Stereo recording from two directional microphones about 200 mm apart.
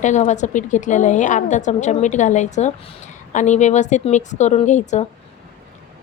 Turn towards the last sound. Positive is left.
turn(degrees=35)  # may be behind; listen again after turning